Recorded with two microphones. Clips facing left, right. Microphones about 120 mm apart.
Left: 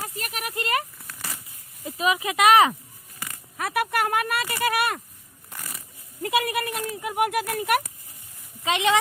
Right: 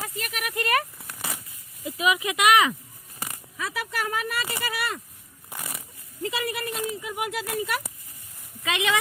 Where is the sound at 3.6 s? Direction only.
60° left (ahead or behind).